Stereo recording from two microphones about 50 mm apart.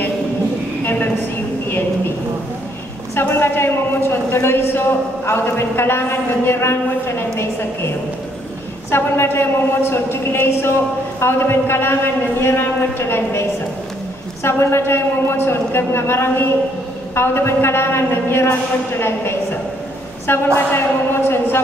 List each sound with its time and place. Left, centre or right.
0.8 s a sound: left
3.2 s a man's voice: left
8.9 s a man's voice: left
14.4 s a man's voice: left
20.5 s a man's voice: left